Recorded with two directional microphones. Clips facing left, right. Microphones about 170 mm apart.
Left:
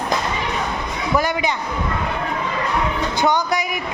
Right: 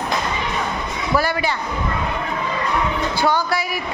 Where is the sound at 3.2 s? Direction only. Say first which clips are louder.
Left 1 dB; 20° left (ahead or behind).